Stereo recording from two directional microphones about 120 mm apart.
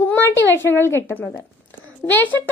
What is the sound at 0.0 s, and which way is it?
A child's voice, 15° left (ahead or behind).